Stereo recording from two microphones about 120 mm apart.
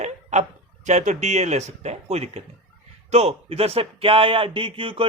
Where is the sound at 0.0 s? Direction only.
75° right (ahead or behind).